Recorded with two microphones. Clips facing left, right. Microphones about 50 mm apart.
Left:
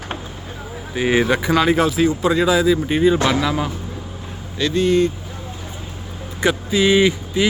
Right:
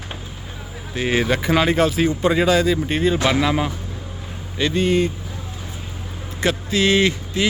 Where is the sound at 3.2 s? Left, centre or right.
Centre.